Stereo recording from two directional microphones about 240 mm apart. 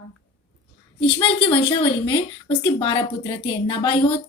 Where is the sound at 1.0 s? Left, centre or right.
Left.